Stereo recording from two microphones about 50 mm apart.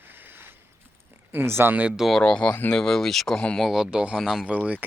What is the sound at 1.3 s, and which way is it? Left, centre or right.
Speech, right.